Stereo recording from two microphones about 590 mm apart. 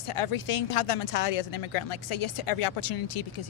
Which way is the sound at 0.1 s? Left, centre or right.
Left.